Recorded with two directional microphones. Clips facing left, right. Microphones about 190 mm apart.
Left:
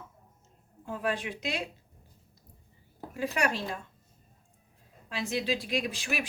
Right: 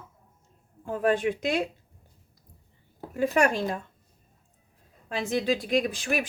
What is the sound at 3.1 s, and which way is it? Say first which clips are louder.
Speech: right 7 dB; 50° right (ahead or behind).